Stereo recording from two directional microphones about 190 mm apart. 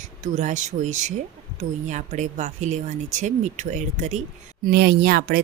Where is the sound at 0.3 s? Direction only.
40° right (ahead or behind).